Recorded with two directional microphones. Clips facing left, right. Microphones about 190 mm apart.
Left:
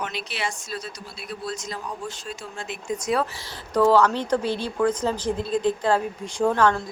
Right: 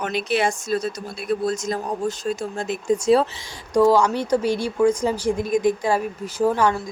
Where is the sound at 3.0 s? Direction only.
30° right (ahead or behind).